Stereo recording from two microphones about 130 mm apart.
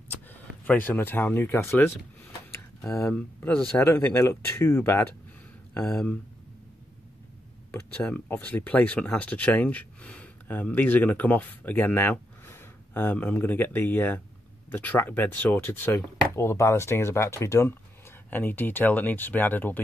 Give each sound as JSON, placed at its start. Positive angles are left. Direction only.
{"t": 0.3, "sound": "speech", "side_deg": 15}
{"t": 3.1, "sound": "speech", "side_deg": 10}
{"t": 5.9, "sound": "speech", "side_deg": 5}
{"t": 8.0, "sound": "speech", "side_deg": 15}